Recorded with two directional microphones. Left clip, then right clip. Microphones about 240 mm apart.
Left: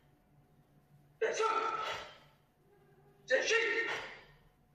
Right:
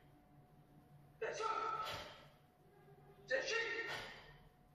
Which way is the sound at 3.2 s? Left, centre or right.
Left.